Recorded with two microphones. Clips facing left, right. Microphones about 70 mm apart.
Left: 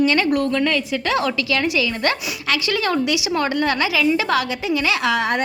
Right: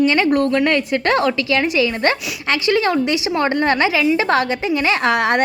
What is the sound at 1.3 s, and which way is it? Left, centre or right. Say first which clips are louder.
A woman's voice: right 3 dB; right.